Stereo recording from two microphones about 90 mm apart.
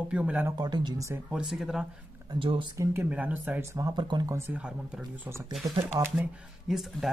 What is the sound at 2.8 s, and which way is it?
Speech, 30° right (ahead or behind).